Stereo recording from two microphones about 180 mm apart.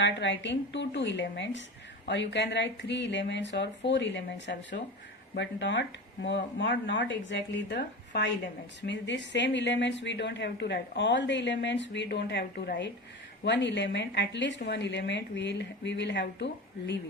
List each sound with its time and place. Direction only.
0.0 s a woman's voice: 80° left